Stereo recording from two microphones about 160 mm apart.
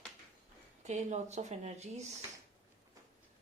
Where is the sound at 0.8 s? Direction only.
45° right (ahead or behind).